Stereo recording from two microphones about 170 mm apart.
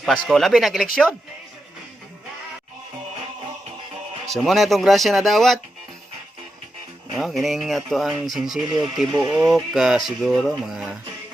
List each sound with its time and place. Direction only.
0.0 s speech: centre (ahead or behind)
4.3 s speech: centre (ahead or behind)
7.1 s speech: centre (ahead or behind)
9.1 s speech: 25° right (ahead or behind)
9.4 s speech: centre (ahead or behind)